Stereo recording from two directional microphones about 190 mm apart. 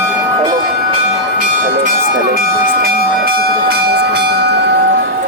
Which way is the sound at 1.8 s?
50° right (ahead or behind).